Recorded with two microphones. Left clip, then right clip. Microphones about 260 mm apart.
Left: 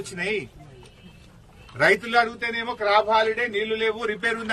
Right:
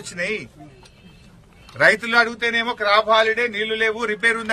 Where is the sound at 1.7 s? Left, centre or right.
Centre.